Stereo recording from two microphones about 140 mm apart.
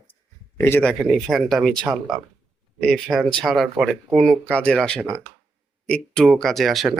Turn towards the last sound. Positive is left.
turn(degrees=0)  # may be behind; listen again after turning